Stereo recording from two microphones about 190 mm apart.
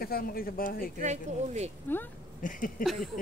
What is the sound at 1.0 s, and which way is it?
Speech, 35° right (ahead or behind).